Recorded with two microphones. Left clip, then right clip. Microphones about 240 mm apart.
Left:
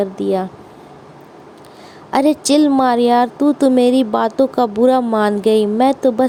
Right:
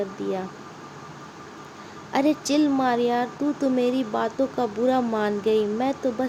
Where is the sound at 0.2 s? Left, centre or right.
Left.